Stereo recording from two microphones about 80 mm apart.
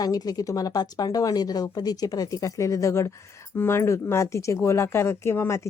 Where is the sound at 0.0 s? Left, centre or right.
Left.